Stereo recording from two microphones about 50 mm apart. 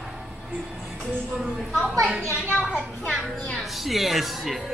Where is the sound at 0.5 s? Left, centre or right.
Centre.